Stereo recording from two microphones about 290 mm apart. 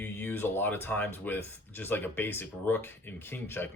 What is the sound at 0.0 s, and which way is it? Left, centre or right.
Speech, centre.